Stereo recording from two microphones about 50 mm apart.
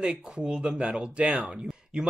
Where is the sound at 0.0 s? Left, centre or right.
Centre.